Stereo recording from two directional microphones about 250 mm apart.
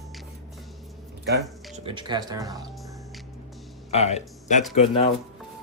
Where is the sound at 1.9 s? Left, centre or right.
Centre.